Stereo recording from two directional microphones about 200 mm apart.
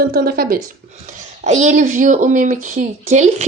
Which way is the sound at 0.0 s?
50° right (ahead or behind).